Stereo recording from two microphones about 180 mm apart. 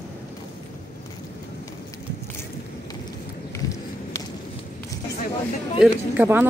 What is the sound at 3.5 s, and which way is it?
Walk, 15° left (ahead or behind).